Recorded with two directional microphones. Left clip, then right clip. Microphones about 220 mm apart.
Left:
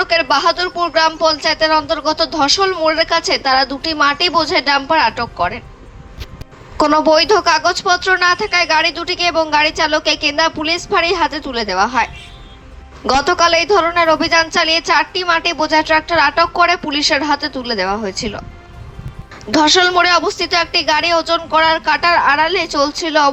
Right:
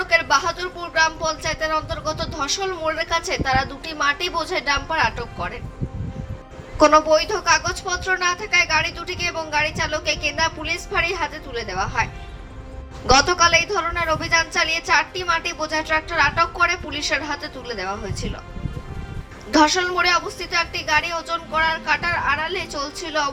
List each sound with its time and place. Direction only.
0.0 s speech: 35° left (ahead or behind)
6.7 s speech: 40° left (ahead or behind)
13.1 s speech: 35° left (ahead or behind)
19.5 s speech: 40° left (ahead or behind)